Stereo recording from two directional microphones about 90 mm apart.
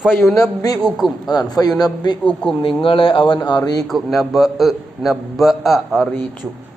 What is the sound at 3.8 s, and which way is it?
A man's voice, centre (ahead or behind).